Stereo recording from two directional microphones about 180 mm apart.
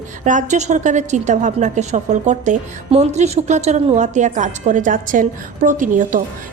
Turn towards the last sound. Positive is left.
turn(degrees=-45)  # may be behind; listen again after turning